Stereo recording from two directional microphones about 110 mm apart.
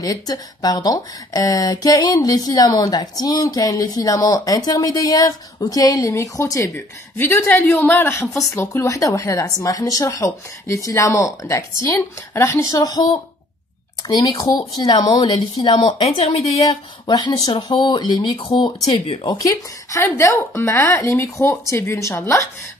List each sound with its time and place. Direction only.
0.0 s speech: 35° left (ahead or behind)
7.2 s a woman's voice: 15° left (ahead or behind); by 15.9 s 40° left (ahead or behind)
17.0 s speech: 40° left (ahead or behind)
19.4 s a woman's voice: 25° left (ahead or behind)